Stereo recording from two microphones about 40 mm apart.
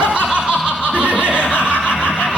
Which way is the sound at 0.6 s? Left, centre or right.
Right.